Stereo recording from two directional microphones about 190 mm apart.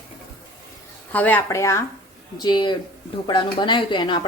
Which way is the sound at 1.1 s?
10° left (ahead or behind).